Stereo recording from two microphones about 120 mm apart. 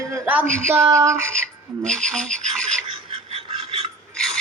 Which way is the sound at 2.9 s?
55° right (ahead or behind).